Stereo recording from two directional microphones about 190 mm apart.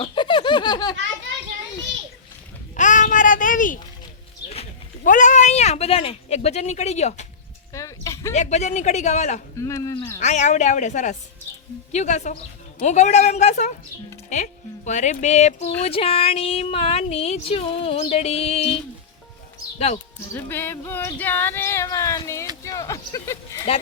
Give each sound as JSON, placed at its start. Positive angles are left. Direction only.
{"t": 0.0, "sound": "laughter", "side_deg": 25}
{"t": 2.7, "sound": "a sound", "side_deg": 40}
{"t": 5.0, "sound": "speech", "side_deg": 40}
{"t": 7.7, "sound": "a sound", "side_deg": 15}
{"t": 8.3, "sound": "speech", "side_deg": 35}
{"t": 9.6, "sound": "music", "side_deg": 15}
{"t": 10.2, "sound": "speech", "side_deg": 40}
{"t": 20.1, "sound": "music", "side_deg": 10}
{"t": 22.6, "sound": "a sound", "side_deg": 15}